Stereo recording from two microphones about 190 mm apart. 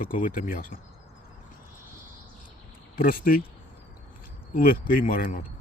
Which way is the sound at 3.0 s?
50° left (ahead or behind).